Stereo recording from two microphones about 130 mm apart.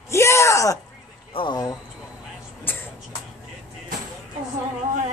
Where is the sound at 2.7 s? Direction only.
15° left (ahead or behind).